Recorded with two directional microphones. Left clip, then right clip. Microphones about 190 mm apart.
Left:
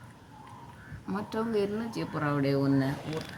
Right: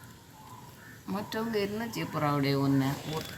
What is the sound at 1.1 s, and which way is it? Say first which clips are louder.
Speech: left 1 dB; 5° right (ahead or behind).